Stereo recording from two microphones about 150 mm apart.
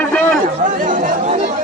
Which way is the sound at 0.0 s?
10° left (ahead or behind).